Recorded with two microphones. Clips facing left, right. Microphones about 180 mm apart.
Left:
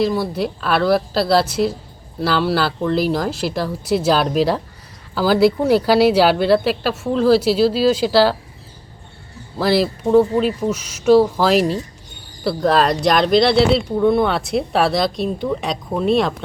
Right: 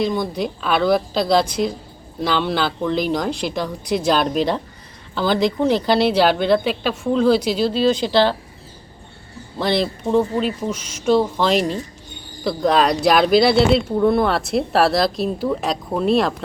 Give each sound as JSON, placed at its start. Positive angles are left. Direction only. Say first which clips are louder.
{"t": 0.0, "sound": "speech", "louder": "left 2 dB", "side_deg": 5}
{"t": 9.6, "sound": "speech", "louder": "left 3 dB", "side_deg": 5}